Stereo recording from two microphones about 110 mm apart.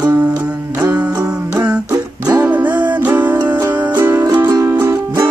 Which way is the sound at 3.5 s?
25° right (ahead or behind).